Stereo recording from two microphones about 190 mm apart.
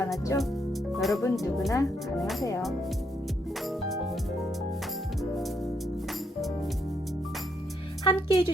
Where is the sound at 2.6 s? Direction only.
Centre (ahead or behind).